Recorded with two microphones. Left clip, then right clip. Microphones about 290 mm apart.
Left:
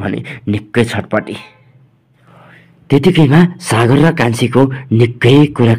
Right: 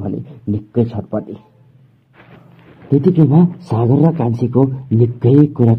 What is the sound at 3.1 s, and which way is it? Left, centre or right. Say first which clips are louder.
Speech: left 3 dB; left.